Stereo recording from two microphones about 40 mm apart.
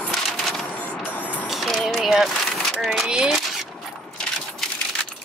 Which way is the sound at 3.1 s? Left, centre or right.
Centre.